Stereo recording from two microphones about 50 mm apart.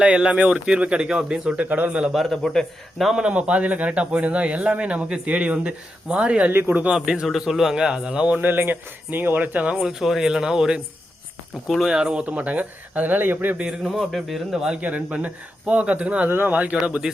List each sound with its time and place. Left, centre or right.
0.0 s speech: right
1.6 s speech: right
2.3 s a man's voice: centre
3.2 s speech: right
6.5 s speech: right
6.9 s a man's voice: centre
8.4 s speech: right
9.8 s a man's voice: centre
11.9 s a man's voice: centre
12.2 s speech: right
13.6 s a man's voice: centre
14.0 s speech: centre
14.5 s a man's voice: centre
14.8 s speech: right